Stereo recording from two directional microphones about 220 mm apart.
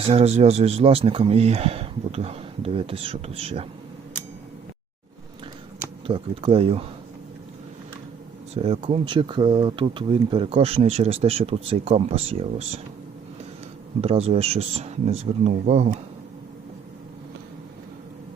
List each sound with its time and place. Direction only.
0.1 s speech: 30° right (ahead or behind)
6.1 s speech: 25° right (ahead or behind)
8.5 s speech: 30° right (ahead or behind)
14.0 s speech: 25° right (ahead or behind)